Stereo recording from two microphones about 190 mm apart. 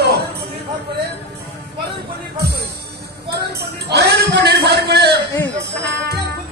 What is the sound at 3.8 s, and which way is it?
Music, 60° right (ahead or behind).